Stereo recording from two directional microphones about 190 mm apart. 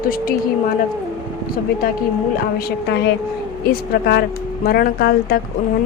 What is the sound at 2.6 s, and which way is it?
A woman's voice, 55° left (ahead or behind).